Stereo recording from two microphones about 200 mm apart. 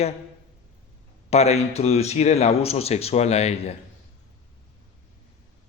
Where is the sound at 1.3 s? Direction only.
30° left (ahead or behind).